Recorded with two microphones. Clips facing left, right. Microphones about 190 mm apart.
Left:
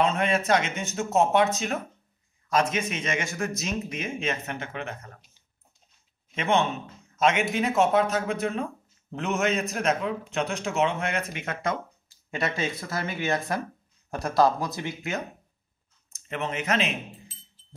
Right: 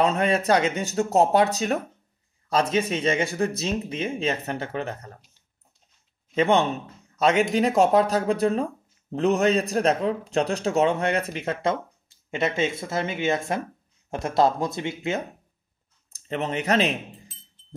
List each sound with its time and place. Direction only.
0.0 s speech: 35° right (ahead or behind)
6.3 s speech: 35° right (ahead or behind)
16.1 s speech: 35° right (ahead or behind)